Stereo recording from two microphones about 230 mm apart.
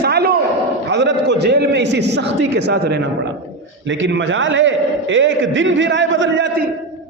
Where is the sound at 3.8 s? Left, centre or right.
Right.